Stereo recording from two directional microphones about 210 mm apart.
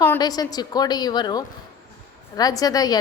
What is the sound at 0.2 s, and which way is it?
A woman's voice, 20° left (ahead or behind).